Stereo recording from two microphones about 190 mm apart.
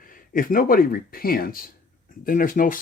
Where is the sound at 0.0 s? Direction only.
45° left (ahead or behind).